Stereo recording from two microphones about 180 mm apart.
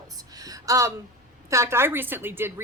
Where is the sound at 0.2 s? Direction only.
20° right (ahead or behind).